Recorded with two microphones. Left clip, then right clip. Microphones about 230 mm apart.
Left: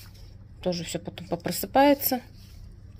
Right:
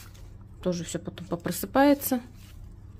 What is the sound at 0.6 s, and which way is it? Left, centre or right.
A woman's voice, centre.